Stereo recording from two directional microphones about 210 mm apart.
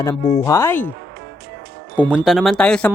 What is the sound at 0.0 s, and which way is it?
Speech, 15° left (ahead or behind).